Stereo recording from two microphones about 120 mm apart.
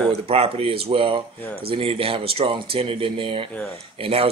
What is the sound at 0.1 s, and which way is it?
Speech, 55° right (ahead or behind).